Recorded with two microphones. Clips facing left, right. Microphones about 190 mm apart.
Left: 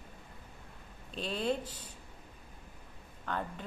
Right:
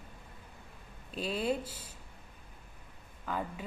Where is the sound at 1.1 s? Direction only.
5° right (ahead or behind).